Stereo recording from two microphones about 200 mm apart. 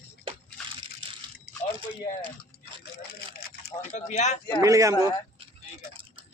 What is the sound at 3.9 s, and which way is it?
Speech, 35° left (ahead or behind).